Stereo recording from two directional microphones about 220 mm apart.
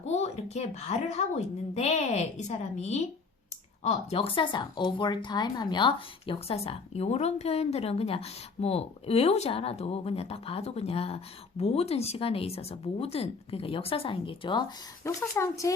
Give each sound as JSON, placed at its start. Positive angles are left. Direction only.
{"t": 0.1, "sound": "a woman's voice", "side_deg": 30}